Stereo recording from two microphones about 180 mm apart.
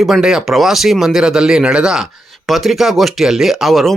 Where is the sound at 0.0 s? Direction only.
Centre (ahead or behind).